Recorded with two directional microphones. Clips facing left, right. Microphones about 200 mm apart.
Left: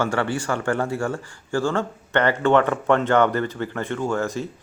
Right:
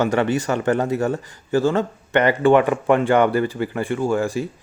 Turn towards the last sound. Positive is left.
turn(degrees=-15)  # may be behind; listen again after turning